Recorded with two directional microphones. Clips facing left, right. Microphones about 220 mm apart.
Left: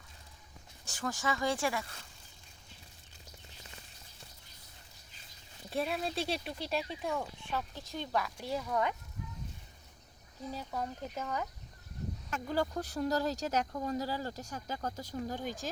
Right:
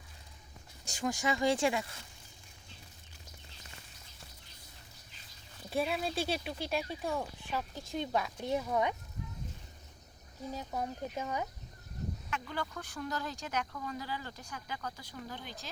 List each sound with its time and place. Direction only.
0.9 s speech: 15° right (ahead or behind)
5.7 s speech: centre (ahead or behind)
7.9 s a woman's voice: 20° right (ahead or behind)
10.5 s speech: 15° right (ahead or behind)
12.3 s speech: 40° left (ahead or behind)